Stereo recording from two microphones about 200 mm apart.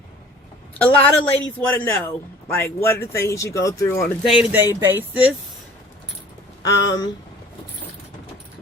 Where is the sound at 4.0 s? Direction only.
5° right (ahead or behind).